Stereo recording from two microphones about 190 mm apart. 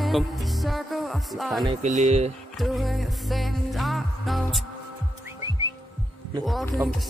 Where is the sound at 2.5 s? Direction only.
Centre (ahead or behind).